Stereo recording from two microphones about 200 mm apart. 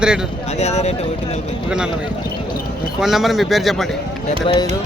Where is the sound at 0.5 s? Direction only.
35° left (ahead or behind).